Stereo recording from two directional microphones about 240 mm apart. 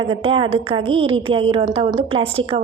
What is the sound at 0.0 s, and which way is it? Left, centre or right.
A woman's voice, right.